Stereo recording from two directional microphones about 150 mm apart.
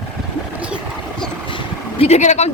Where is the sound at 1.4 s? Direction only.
35° left (ahead or behind).